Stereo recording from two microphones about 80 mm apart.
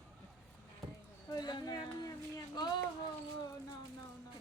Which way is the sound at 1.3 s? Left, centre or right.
Left.